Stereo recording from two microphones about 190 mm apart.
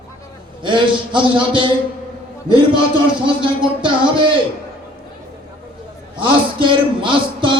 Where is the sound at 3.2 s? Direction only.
25° right (ahead or behind).